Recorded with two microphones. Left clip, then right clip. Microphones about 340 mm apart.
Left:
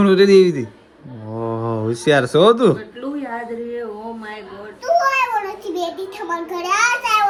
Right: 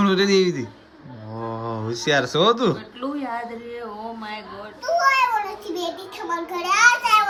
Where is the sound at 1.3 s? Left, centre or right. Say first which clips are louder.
Left 6 dB; left.